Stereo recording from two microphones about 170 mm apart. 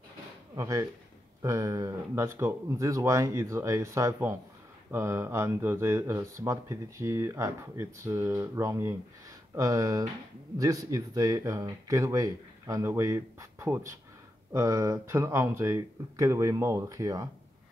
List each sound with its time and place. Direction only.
0.6 s speech: 20° right (ahead or behind)